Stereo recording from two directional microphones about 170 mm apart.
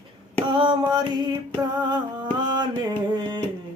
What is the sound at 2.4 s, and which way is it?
Mantra, 25° right (ahead or behind).